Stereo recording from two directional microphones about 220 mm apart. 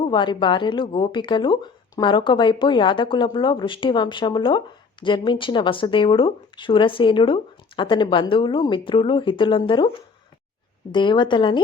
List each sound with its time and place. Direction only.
0.1 s speech: 20° left (ahead or behind)
10.9 s speech: 20° left (ahead or behind)